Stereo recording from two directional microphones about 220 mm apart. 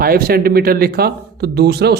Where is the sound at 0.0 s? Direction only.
40° right (ahead or behind).